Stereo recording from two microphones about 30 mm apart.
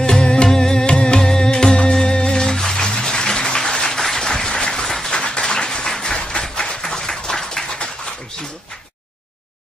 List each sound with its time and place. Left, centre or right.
0.2 s music: left
0.8 s music: left
2.1 s humming: left
2.4 s applause: centre
4.8 s a sound: centre
5.1 s applause: left
5.4 s a sound: left
6.1 s a sound: left
6.5 s clapping: left